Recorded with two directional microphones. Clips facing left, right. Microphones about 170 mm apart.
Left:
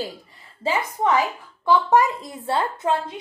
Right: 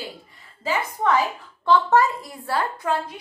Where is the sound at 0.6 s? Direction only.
15° left (ahead or behind).